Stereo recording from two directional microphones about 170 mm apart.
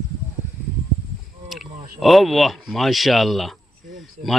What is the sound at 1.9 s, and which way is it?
Speech, centre (ahead or behind).